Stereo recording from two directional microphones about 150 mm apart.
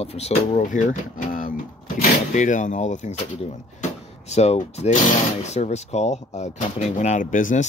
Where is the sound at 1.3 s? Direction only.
65° left (ahead or behind).